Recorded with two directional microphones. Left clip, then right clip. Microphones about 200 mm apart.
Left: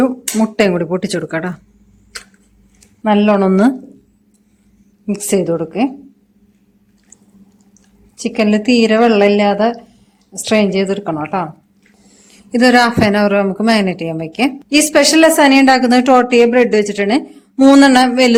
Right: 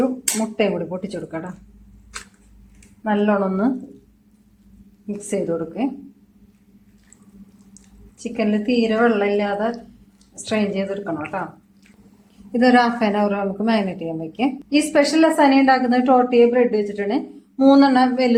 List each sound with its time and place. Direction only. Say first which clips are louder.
0.0 s a woman's voice: left 6 dB; 55° left (ahead or behind)
3.0 s a woman's voice: left 7 dB; 65° left (ahead or behind)
5.0 s a woman's voice: left 8 dB; 65° left (ahead or behind)
8.2 s a woman's voice: left 8 dB; 65° left (ahead or behind)
12.5 s a man's voice: left 5 dB; 45° left (ahead or behind)